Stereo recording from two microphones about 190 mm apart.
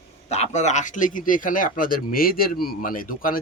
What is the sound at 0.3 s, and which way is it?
Speech, 35° left (ahead or behind).